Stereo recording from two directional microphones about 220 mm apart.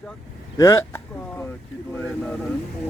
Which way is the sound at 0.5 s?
15° left (ahead or behind).